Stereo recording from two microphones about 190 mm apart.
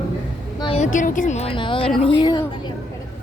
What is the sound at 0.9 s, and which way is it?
Speech, 45° left (ahead or behind).